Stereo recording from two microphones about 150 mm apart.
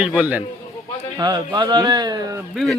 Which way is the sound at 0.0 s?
10° right (ahead or behind).